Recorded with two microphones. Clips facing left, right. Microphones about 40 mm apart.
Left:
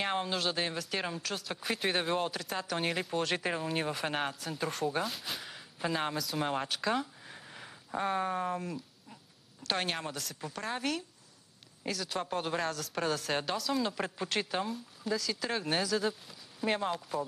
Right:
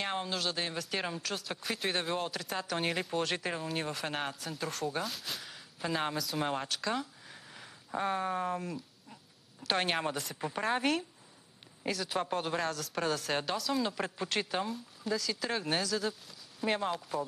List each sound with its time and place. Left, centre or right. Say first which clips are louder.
0.0 s a woman's voice: left 2 dB; centre